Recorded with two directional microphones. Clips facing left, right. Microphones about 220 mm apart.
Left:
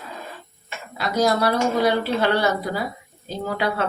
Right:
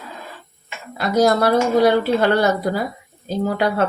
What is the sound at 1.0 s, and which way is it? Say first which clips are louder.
Speech: right 4 dB; 50° right (ahead or behind).